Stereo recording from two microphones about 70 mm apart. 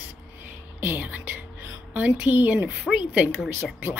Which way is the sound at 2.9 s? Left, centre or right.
Centre.